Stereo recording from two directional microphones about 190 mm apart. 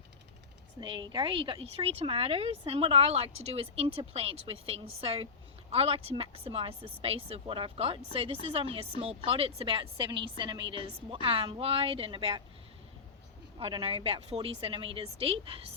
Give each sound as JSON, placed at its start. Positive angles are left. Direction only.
{"t": 0.8, "sound": "a woman's voice", "side_deg": -25}
{"t": 13.6, "sound": "a woman's voice", "side_deg": -30}